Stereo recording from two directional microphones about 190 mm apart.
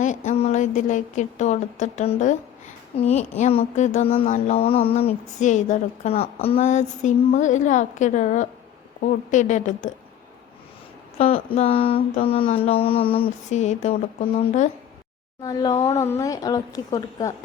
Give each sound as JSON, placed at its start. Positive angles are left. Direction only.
{"t": 0.0, "sound": "a woman's voice", "side_deg": 40}
{"t": 11.2, "sound": "a woman's voice", "side_deg": 30}
{"t": 15.4, "sound": "a woman's voice", "side_deg": 20}